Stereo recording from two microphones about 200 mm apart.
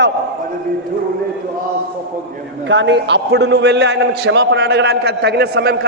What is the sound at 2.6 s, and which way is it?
A man's voice, 65° right (ahead or behind).